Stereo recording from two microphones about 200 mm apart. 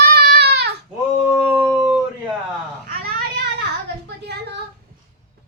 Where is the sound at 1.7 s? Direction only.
5° right (ahead or behind).